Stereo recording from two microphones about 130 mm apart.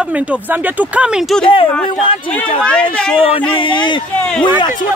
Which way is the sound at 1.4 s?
40° left (ahead or behind).